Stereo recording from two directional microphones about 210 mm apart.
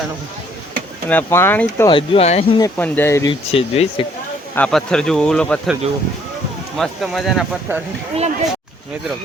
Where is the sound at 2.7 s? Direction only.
10° left (ahead or behind).